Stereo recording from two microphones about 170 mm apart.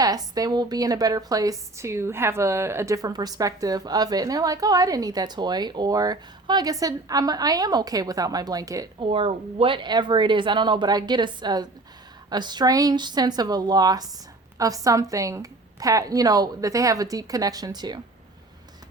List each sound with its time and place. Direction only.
0.0 s a woman's voice: 20° right (ahead or behind)
9.0 s a woman's voice: 35° right (ahead or behind)